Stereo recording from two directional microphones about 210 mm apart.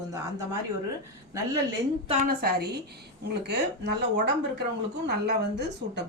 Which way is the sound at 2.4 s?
50° right (ahead or behind).